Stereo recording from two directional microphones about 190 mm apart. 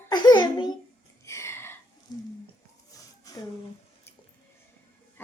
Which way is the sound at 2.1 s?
20° left (ahead or behind).